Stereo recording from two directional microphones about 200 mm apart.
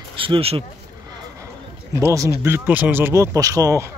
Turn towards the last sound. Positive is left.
turn(degrees=-15)  # may be behind; listen again after turning